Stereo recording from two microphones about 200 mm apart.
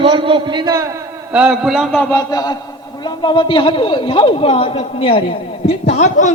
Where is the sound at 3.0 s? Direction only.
20° left (ahead or behind).